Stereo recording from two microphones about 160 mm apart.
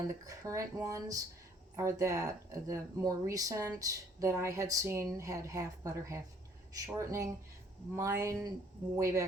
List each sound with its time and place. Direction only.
0.1 s speech: 20° right (ahead or behind)